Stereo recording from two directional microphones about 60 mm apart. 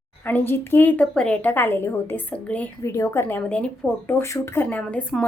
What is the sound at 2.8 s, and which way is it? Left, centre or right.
Speech, left.